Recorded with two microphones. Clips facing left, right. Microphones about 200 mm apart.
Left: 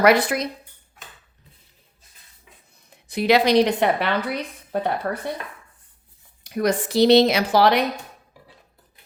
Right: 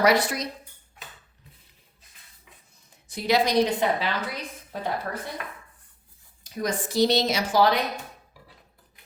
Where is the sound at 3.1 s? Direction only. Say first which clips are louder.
Left 6 dB; 65° left (ahead or behind).